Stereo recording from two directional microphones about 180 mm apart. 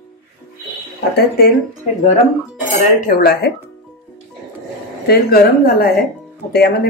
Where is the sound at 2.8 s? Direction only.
50° left (ahead or behind).